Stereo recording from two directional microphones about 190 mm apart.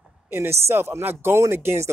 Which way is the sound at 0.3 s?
15° right (ahead or behind).